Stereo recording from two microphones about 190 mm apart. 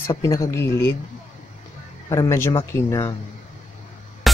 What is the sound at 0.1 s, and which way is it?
Speech, 15° left (ahead or behind).